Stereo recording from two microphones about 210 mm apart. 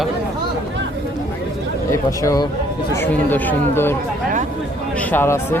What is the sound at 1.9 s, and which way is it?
Speech, 15° left (ahead or behind).